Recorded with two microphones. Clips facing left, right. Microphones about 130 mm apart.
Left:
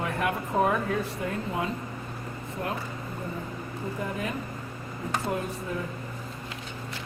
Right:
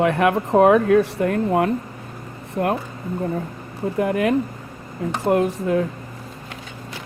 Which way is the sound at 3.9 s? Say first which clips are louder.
Right 15 dB; 75° right (ahead or behind).